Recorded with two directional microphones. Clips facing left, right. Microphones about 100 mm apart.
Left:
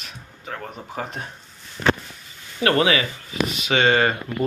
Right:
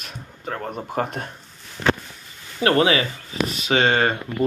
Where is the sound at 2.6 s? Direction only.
30° right (ahead or behind).